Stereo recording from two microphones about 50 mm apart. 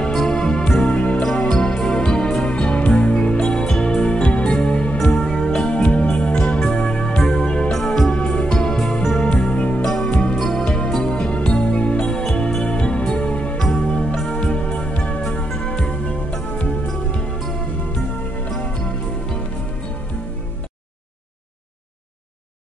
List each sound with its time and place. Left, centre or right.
0.0 s music: centre
4.9 s music: centre
5.7 s music: left; by 9.3 s centre
9.3 s music: centre
12.4 s music: centre
12.6 s music: centre
14.3 s music: centre
15.2 s music: centre